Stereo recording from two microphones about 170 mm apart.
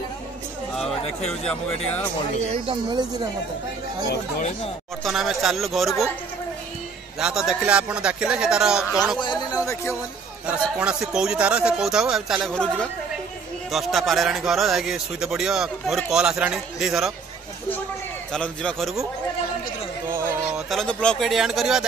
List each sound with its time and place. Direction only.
2.5 s speech: 30° right (ahead or behind)
5.0 s a man's voice: centre (ahead or behind)
7.2 s a man's voice: 5° right (ahead or behind)
9.2 s a sound: 25° left (ahead or behind)
10.4 s a man's voice: 5° right (ahead or behind)
13.7 s a man's voice: centre (ahead or behind)
18.3 s a man's voice: 5° left (ahead or behind)
20.1 s speech: 15° right (ahead or behind)
20.7 s a man's voice: 5° left (ahead or behind)